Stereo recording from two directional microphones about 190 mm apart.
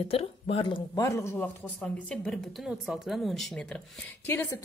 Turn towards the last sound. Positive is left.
turn(degrees=15)  # may be behind; listen again after turning